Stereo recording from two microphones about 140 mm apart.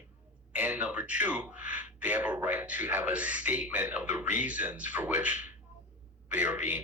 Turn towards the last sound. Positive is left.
turn(degrees=-10)  # may be behind; listen again after turning